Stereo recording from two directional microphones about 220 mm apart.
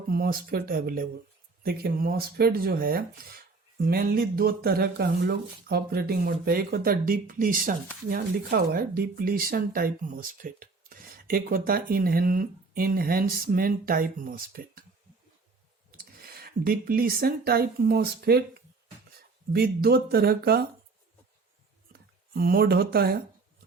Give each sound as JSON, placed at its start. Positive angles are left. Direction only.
{"t": 0.1, "sound": "speech", "side_deg": -40}
{"t": 16.0, "sound": "speech", "side_deg": -45}
{"t": 22.4, "sound": "speech", "side_deg": -45}